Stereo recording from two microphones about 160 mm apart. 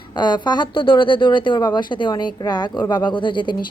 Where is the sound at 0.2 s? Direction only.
30° left (ahead or behind).